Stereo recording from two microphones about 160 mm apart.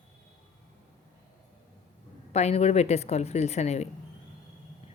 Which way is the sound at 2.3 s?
40° left (ahead or behind).